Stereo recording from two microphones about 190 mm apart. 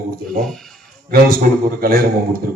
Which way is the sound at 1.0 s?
50° right (ahead or behind).